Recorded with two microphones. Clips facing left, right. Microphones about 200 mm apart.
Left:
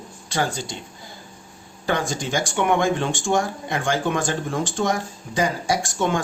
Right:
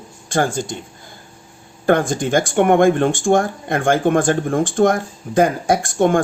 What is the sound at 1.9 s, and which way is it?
Speech, 55° right (ahead or behind).